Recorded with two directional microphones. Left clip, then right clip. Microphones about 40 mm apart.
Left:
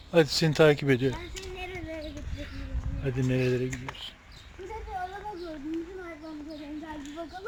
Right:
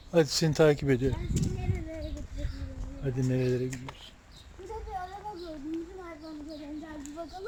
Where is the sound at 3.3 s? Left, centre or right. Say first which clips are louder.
Left 2 dB; centre.